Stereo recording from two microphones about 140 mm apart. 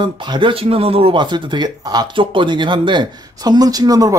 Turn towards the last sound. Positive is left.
turn(degrees=-25)  # may be behind; listen again after turning